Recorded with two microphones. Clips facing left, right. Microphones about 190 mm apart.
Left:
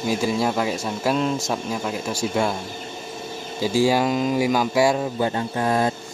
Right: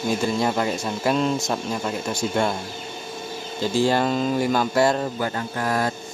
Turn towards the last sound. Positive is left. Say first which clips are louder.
# left 3 dB
turn(degrees=20)  # may be behind; listen again after turning